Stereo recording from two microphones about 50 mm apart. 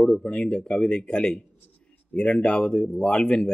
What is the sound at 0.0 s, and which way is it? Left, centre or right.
Speech, centre.